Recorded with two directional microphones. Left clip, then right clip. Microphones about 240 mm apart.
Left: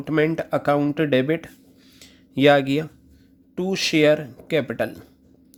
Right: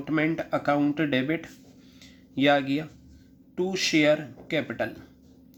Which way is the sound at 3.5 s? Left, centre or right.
Left.